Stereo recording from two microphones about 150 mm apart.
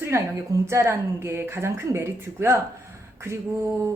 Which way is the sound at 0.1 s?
20° right (ahead or behind).